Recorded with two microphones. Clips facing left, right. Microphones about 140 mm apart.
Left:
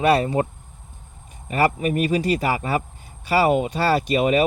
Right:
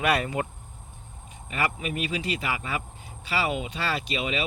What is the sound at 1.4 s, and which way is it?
Speech, 40° left (ahead or behind).